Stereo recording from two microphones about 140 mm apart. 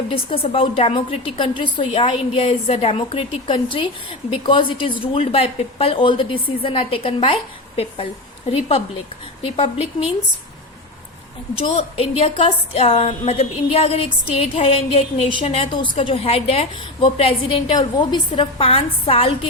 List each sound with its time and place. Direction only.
0.1 s a woman's voice: 40° left (ahead or behind)
8.4 s a woman's voice: 45° left (ahead or behind)
11.7 s a woman's voice: 45° left (ahead or behind)
15.7 s a woman's voice: 35° left (ahead or behind)
17.7 s a woman's voice: 30° left (ahead or behind)